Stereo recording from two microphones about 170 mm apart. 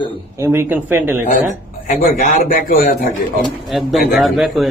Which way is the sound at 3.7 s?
Centre (ahead or behind).